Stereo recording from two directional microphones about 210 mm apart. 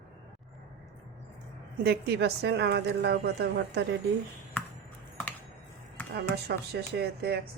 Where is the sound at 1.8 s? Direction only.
50° right (ahead or behind).